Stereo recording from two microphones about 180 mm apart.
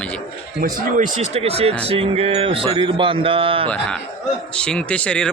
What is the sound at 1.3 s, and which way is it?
Speech, 35° right (ahead or behind).